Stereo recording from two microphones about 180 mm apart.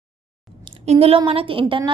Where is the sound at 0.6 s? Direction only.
35° right (ahead or behind).